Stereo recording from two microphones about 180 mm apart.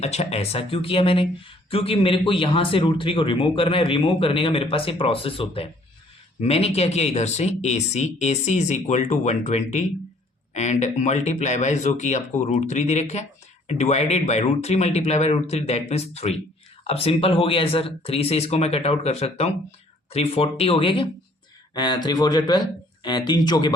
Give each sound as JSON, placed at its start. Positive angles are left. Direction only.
{"t": 0.0, "sound": "speech", "side_deg": 35}